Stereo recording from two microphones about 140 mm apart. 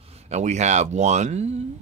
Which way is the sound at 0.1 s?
55° right (ahead or behind).